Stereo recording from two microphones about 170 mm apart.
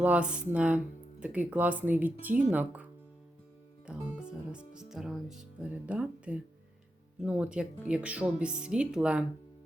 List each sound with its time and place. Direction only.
0.0 s speech: 5° right (ahead or behind)
3.8 s speech: 5° right (ahead or behind)